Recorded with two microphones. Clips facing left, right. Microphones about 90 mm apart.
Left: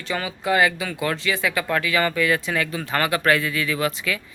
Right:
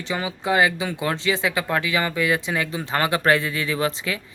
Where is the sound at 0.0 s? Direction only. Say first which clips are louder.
Even; 20° right (ahead or behind).